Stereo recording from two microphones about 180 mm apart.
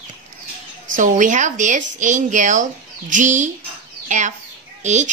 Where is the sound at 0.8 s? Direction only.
45° right (ahead or behind).